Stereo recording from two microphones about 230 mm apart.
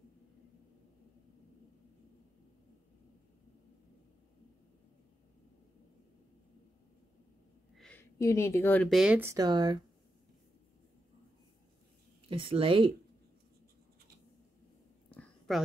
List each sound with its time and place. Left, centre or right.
7.7 s speech: centre
9.0 s speech: centre
12.3 s speech: right
15.1 s a sound: centre